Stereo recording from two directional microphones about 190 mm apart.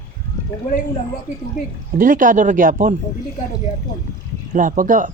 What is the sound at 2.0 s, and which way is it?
Speech, 45° right (ahead or behind).